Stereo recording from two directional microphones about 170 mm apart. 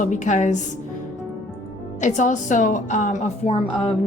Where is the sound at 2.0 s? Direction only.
45° left (ahead or behind).